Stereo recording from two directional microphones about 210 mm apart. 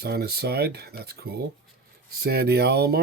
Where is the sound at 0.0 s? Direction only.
50° right (ahead or behind).